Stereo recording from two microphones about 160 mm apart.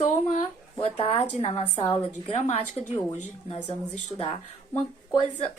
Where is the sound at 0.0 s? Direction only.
45° left (ahead or behind).